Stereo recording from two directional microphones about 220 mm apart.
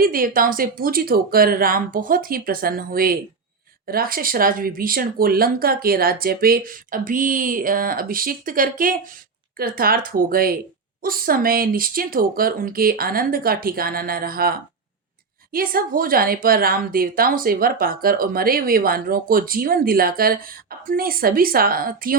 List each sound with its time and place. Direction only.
0.0 s a woman's voice: 40° right (ahead or behind)